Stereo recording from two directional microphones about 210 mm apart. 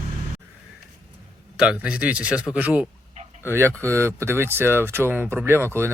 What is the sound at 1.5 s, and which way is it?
Speech, 5° right (ahead or behind).